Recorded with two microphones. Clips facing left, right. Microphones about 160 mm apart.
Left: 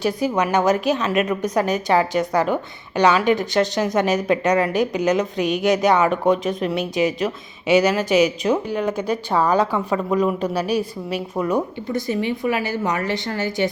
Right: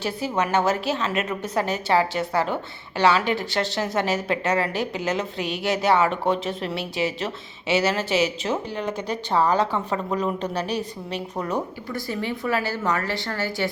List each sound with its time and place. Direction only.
0.0 s a woman's voice: 15° left (ahead or behind)